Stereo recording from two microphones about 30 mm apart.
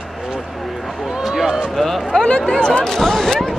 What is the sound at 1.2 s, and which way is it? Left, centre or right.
Speech, centre.